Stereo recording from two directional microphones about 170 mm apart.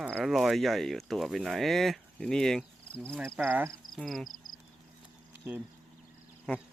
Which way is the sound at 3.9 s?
Centre (ahead or behind).